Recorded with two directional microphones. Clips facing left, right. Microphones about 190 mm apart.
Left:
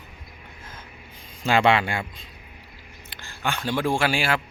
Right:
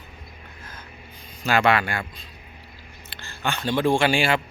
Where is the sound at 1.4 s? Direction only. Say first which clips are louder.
Left 1 dB; 25° left (ahead or behind).